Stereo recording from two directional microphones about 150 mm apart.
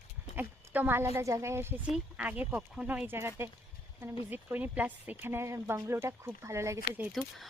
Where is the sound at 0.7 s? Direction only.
15° right (ahead or behind).